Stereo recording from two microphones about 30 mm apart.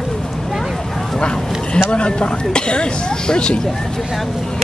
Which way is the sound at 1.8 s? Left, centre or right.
Left.